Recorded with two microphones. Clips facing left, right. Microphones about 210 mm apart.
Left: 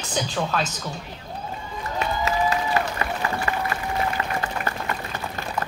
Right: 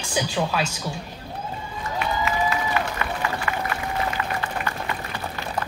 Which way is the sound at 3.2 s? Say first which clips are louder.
Left 1 dB; 35° left (ahead or behind).